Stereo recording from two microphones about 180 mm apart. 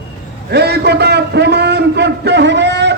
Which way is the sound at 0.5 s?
65° right (ahead or behind).